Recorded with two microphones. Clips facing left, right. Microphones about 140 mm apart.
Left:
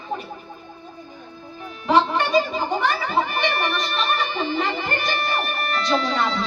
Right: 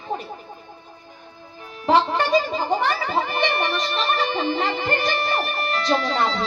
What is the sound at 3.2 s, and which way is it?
Speech, 30° right (ahead or behind).